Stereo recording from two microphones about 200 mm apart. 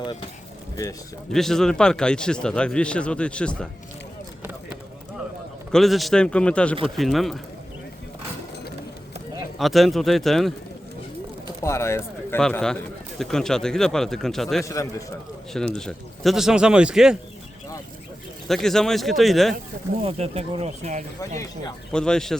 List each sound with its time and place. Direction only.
1.3 s speech: centre (ahead or behind)
5.7 s speech: centre (ahead or behind)
9.6 s speech: centre (ahead or behind)
11.4 s speech: 15° left (ahead or behind)
14.6 s a man's voice: 15° left (ahead or behind)
15.7 s speech: 5° left (ahead or behind)
18.4 s speech: centre (ahead or behind)
20.0 s speech: 30° right (ahead or behind)
21.9 s speech: 5° left (ahead or behind)